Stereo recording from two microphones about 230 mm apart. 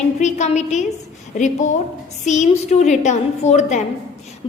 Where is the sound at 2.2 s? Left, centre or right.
Left.